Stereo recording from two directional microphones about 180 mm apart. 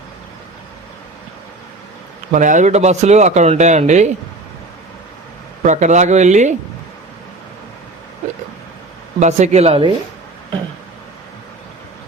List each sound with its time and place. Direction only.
2.3 s speech: 45° right (ahead or behind)
5.6 s speech: 40° right (ahead or behind)
9.2 s speech: 40° right (ahead or behind)